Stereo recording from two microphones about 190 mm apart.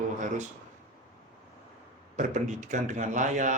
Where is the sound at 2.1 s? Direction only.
40° right (ahead or behind).